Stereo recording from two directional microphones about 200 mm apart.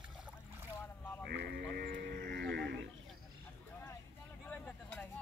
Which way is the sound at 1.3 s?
50° right (ahead or behind).